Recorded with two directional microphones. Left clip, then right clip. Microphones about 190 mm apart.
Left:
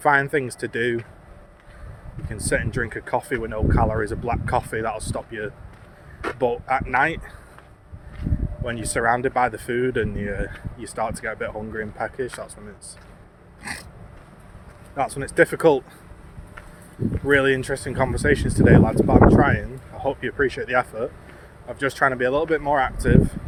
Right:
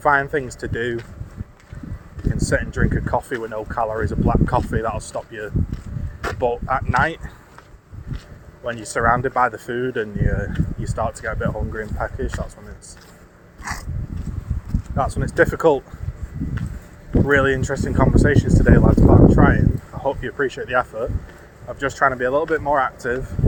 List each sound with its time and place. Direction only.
0.0 s speech: 15° left (ahead or behind)
2.3 s speech: 15° left (ahead or behind)
8.6 s speech: 20° left (ahead or behind)
14.9 s speech: 10° left (ahead or behind)
17.2 s speech: 15° left (ahead or behind)